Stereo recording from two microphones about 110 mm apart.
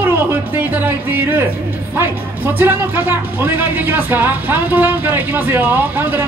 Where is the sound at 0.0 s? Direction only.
20° right (ahead or behind).